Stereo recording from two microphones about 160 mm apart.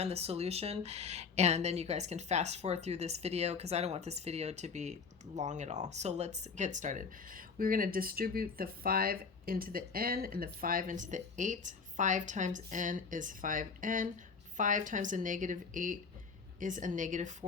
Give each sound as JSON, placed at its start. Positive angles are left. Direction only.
{"t": 0.0, "sound": "a woman's voice", "side_deg": -40}